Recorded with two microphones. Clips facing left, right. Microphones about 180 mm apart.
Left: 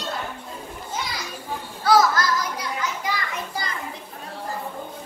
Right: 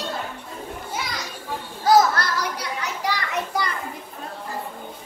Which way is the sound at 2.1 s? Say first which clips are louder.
Left 2 dB; 70° right (ahead or behind).